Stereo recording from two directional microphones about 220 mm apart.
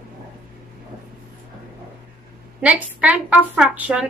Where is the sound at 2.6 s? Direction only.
5° right (ahead or behind).